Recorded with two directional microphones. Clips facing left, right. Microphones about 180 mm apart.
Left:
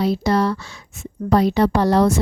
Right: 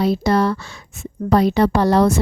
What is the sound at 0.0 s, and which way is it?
A woman's voice, 55° right (ahead or behind).